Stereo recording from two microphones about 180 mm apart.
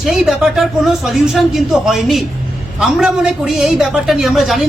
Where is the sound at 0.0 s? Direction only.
Centre (ahead or behind).